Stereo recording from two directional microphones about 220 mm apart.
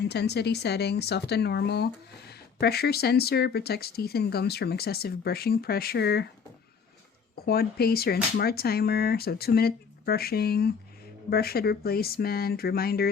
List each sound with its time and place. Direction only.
0.0 s speech: 50° left (ahead or behind)
7.4 s speech: 45° left (ahead or behind)